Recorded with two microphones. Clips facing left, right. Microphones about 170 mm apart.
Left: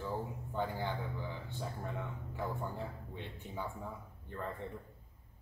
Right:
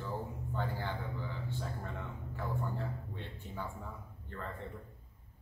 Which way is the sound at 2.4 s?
15° left (ahead or behind).